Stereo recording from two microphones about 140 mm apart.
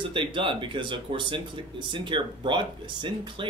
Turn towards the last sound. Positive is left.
turn(degrees=-35)  # may be behind; listen again after turning